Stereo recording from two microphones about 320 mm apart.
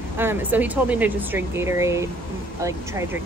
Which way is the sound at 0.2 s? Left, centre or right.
Centre.